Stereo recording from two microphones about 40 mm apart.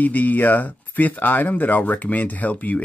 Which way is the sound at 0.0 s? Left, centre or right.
Left.